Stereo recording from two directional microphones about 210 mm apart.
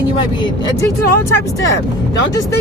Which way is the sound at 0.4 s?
15° left (ahead or behind).